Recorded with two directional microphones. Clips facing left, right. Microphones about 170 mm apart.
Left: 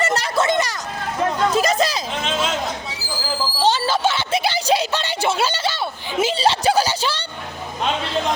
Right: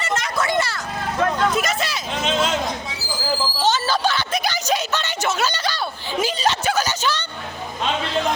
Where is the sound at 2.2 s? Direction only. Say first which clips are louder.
Right 3 dB; centre (ahead or behind).